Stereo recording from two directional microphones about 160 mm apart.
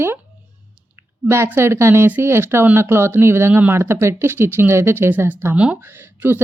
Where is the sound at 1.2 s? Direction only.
15° right (ahead or behind).